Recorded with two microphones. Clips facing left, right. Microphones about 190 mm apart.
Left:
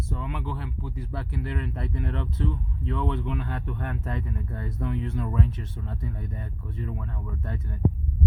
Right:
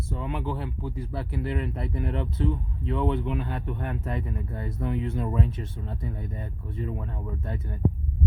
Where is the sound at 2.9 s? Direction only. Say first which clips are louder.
Right 3 dB; 30° right (ahead or behind).